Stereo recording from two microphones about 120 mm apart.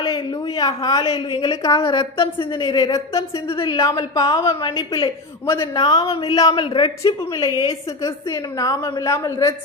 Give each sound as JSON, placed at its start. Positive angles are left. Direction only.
{"t": 0.0, "sound": "a sound", "side_deg": 45}
{"t": 0.4, "sound": "speech", "side_deg": 30}
{"t": 1.1, "sound": "a woman's voice", "side_deg": 50}
{"t": 1.6, "sound": "a woman's voice", "side_deg": 25}
{"t": 1.9, "sound": "a woman's voice", "side_deg": 45}
{"t": 3.1, "sound": "a woman's voice", "side_deg": 25}
{"t": 3.4, "sound": "a woman's voice", "side_deg": 45}
{"t": 3.8, "sound": "a woman's voice", "side_deg": 30}
{"t": 5.5, "sound": "a woman's voice", "side_deg": 25}
{"t": 6.7, "sound": "speech", "side_deg": 40}
{"t": 7.3, "sound": "a woman's voice", "side_deg": 30}